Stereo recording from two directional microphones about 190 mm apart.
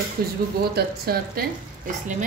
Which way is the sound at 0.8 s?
55° right (ahead or behind).